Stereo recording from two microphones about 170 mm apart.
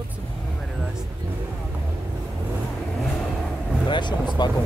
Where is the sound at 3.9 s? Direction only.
25° left (ahead or behind).